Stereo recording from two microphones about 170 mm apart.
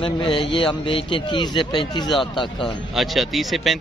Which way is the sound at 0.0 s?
30° left (ahead or behind).